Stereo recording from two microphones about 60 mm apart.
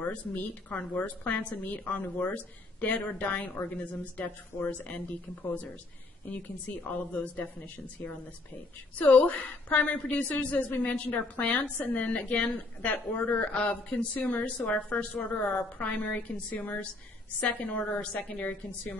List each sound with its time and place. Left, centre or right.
0.0 s a woman's voice: left
6.9 s a woman's voice: left